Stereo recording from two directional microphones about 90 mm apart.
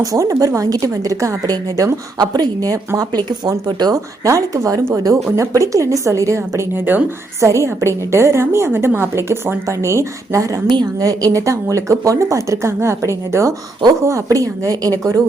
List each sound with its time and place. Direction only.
0.0 s a woman's voice: 35° right (ahead or behind)
7.4 s a woman's voice: 35° right (ahead or behind)